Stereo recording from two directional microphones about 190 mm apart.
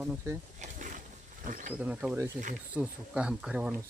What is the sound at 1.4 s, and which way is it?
Speech, 45° right (ahead or behind).